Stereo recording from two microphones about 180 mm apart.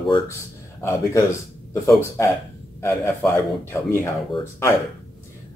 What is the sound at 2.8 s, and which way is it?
A man's voice, 15° left (ahead or behind).